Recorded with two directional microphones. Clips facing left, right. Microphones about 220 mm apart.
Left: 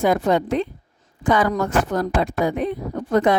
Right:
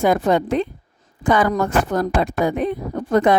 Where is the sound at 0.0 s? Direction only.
50° right (ahead or behind).